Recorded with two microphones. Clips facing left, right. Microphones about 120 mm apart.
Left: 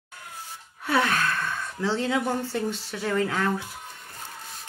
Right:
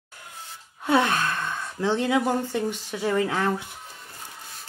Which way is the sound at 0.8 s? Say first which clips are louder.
Right 2 dB; 25° right (ahead or behind).